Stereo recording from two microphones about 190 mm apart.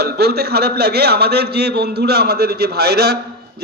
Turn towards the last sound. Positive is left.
turn(degrees=-60)  # may be behind; listen again after turning